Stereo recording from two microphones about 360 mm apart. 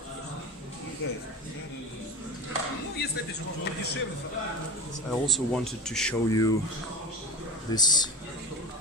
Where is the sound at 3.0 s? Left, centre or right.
Left.